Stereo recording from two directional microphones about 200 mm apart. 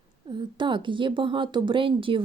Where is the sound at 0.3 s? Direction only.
25° right (ahead or behind).